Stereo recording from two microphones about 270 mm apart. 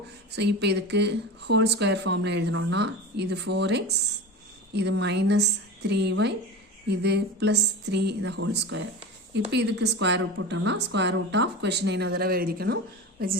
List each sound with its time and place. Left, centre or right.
0.3 s a woman's voice: right